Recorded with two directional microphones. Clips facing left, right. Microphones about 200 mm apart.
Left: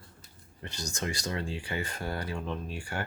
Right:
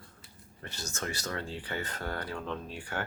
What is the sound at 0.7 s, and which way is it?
Speech, 15° left (ahead or behind).